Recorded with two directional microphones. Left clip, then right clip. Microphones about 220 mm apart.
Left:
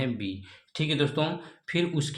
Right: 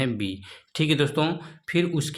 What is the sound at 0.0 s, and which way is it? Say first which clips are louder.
Speech: right 4 dB; 30° right (ahead or behind).